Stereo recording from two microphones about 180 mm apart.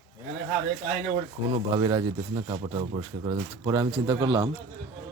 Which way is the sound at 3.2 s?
20° right (ahead or behind).